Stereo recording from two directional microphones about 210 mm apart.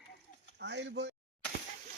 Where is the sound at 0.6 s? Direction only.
55° right (ahead or behind).